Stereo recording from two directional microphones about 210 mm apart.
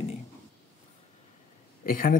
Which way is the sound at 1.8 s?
40° left (ahead or behind).